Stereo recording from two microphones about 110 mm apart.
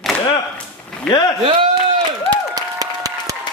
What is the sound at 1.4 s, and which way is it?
Speech, 50° right (ahead or behind).